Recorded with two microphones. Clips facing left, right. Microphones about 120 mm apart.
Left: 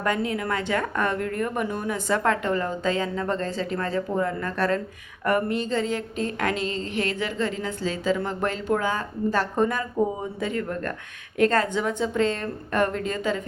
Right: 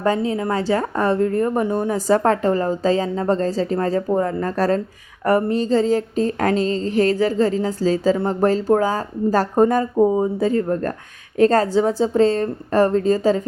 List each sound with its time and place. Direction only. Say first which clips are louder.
0.0 s speech: right 6 dB; 30° right (ahead or behind)